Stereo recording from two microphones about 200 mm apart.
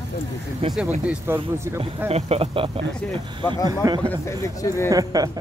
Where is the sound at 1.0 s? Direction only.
10° right (ahead or behind).